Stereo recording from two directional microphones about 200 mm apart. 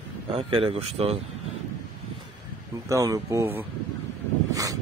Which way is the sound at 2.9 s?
15° right (ahead or behind).